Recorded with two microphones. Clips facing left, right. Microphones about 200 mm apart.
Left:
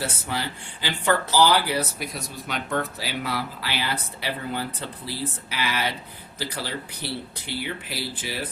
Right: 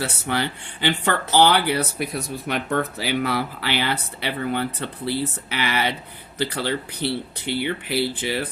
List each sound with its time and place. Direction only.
0.0 s speech: 65° right (ahead or behind)